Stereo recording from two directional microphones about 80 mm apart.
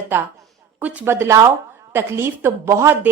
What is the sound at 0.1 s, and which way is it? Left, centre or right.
Speech, right.